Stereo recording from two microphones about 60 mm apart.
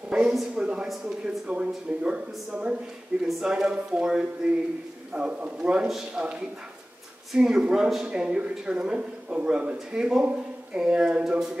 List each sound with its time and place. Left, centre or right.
0.1 s a sound: centre
0.6 s a man's voice: centre
5.9 s speech: centre
7.3 s a man's voice: centre